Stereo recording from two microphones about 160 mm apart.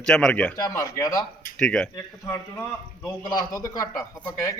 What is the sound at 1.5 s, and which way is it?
Speech, 5° left (ahead or behind).